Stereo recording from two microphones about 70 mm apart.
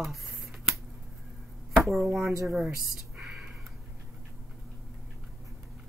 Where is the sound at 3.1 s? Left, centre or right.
Centre.